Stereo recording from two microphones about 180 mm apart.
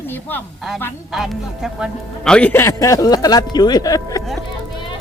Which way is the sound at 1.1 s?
Centre (ahead or behind).